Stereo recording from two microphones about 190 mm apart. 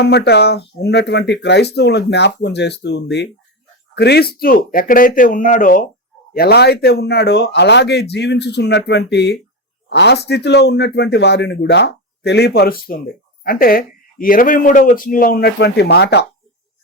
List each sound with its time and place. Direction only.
0.0 s speech: 60° left (ahead or behind)
6.3 s speech: 55° left (ahead or behind)